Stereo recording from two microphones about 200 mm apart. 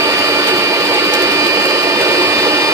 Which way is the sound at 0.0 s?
15° right (ahead or behind).